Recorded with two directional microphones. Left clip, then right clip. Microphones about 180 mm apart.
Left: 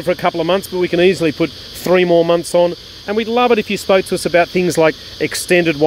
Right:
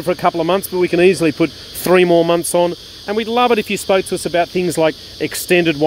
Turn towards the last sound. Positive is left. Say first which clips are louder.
# left 1 dB
turn(degrees=-5)  # may be behind; listen again after turning